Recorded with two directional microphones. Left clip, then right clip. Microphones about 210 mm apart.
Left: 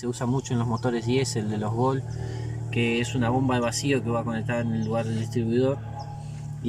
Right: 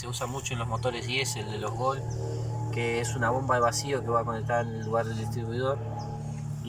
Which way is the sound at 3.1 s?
40° left (ahead or behind).